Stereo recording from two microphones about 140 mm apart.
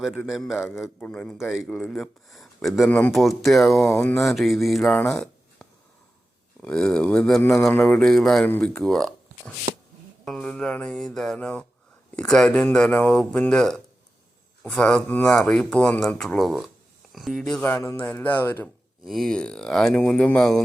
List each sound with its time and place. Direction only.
0.3 s speech: centre (ahead or behind)
3.8 s speech: 15° left (ahead or behind)
4.2 s speech: centre (ahead or behind)
4.9 s a sound: 5° left (ahead or behind)
6.6 s speech: 5° left (ahead or behind)
17.6 s speech: 15° left (ahead or behind)
19.0 s speech: centre (ahead or behind)